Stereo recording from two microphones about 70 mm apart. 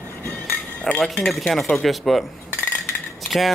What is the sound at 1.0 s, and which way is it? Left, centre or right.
Speech, centre.